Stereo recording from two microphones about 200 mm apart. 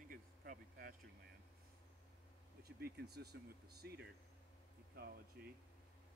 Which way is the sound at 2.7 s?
50° right (ahead or behind).